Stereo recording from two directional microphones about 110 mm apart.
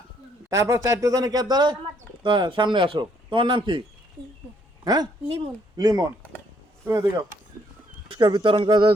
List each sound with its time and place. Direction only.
0.5 s speech: 25° right (ahead or behind); by 3.8 s 50° right (ahead or behind)
4.8 s a woman's voice: 35° right (ahead or behind)
8.1 s speech: 50° right (ahead or behind)